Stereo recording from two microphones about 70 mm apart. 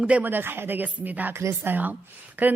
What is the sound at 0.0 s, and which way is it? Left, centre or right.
A woman's voice, right.